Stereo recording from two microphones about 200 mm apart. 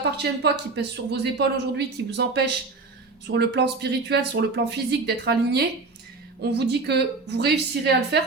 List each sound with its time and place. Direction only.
0.0 s speech: 55° right (ahead or behind)